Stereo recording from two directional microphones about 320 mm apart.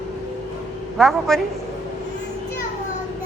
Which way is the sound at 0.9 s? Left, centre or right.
Centre.